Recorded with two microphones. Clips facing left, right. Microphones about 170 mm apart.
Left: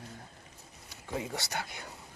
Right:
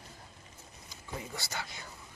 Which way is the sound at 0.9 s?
80° left.